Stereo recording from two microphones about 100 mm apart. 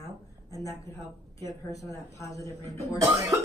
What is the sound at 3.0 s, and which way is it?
Speech, 35° right (ahead or behind).